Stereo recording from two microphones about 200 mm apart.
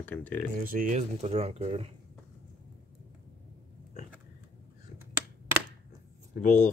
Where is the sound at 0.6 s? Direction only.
40° right (ahead or behind).